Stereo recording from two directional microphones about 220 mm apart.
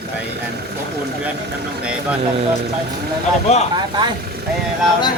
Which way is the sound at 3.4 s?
30° left (ahead or behind).